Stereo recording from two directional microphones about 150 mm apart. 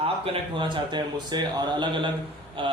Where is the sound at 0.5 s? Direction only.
30° right (ahead or behind).